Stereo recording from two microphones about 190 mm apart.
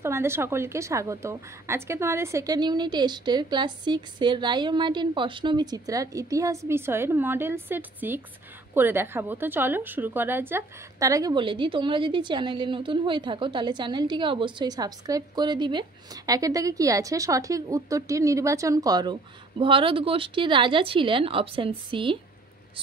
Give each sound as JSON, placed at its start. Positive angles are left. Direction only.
{"t": 0.0, "sound": "a woman's voice", "side_deg": -15}